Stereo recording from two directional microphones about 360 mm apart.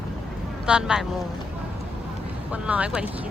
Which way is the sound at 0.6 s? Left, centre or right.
Centre.